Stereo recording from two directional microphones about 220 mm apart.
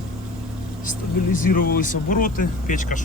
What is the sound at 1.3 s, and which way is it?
Speech, 40° left (ahead or behind).